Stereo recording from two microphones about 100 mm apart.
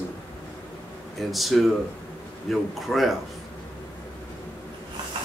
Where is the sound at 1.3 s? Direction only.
Centre (ahead or behind).